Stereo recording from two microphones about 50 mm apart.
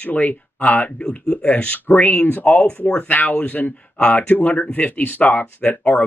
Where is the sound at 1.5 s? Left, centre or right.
Left.